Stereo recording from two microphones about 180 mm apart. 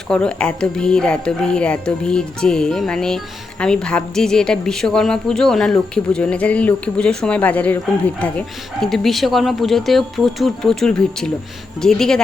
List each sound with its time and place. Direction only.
0.1 s speech: 5° left (ahead or behind)